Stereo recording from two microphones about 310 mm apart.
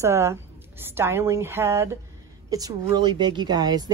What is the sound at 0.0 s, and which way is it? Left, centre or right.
Speech, centre.